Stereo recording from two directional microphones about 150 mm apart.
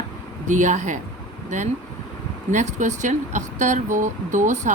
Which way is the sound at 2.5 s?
55° right (ahead or behind).